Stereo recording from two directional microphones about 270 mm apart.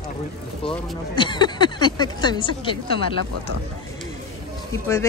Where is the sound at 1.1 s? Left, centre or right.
Centre.